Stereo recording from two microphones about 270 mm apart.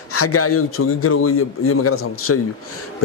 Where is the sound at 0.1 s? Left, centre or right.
Left.